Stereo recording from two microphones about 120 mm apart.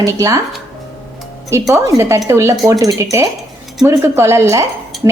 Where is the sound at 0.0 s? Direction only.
25° right (ahead or behind).